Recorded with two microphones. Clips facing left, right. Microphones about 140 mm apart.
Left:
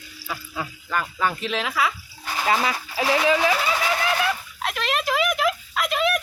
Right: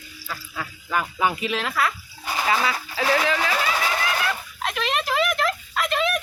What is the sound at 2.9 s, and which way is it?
Speech, 15° left (ahead or behind).